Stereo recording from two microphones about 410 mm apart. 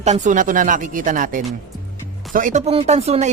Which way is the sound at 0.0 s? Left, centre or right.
Centre.